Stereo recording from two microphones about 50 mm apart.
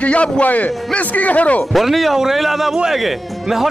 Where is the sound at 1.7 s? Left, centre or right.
Centre.